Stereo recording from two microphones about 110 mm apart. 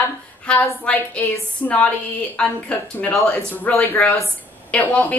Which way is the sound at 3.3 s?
20° left (ahead or behind).